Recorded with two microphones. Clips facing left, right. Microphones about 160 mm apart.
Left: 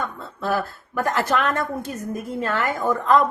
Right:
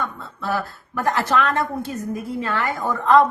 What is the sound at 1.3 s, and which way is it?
Speech, 45° left (ahead or behind).